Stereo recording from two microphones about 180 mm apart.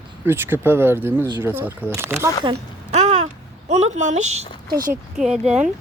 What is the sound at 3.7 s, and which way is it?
Speech, 35° right (ahead or behind).